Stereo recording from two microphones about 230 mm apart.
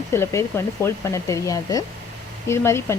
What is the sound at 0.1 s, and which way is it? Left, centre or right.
Speech, centre.